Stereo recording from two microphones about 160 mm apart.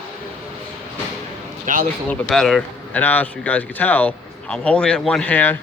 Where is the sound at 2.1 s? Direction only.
5° left (ahead or behind).